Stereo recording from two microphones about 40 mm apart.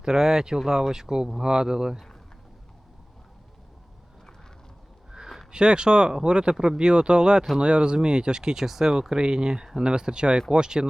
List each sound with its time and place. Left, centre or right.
0.0 s speech: centre
5.5 s speech: right